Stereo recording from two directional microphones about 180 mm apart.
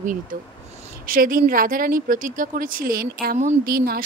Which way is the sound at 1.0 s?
50° right (ahead or behind).